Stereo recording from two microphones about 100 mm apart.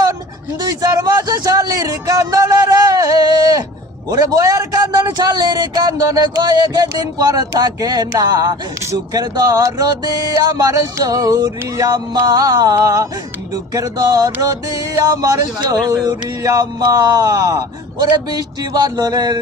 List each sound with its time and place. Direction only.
0.8 s a man's voice: 35° right (ahead or behind)